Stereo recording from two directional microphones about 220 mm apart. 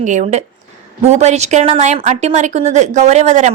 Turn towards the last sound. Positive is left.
turn(degrees=-30)  # may be behind; listen again after turning